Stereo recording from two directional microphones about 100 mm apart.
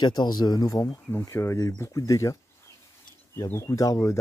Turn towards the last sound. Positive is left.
turn(degrees=35)  # may be behind; listen again after turning